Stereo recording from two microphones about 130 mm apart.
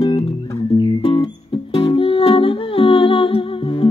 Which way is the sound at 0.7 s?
40° left (ahead or behind).